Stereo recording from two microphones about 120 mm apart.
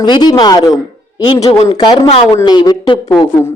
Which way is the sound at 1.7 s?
40° left (ahead or behind).